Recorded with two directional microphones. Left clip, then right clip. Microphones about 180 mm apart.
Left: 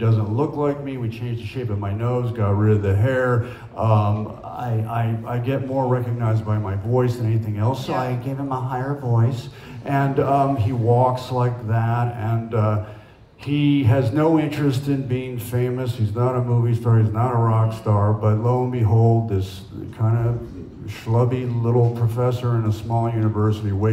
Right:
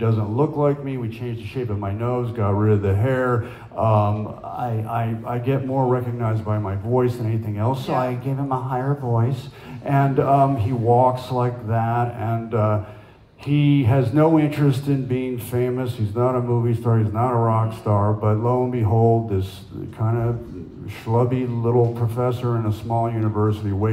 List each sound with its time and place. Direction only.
0.0 s a man's voice: 40° right (ahead or behind)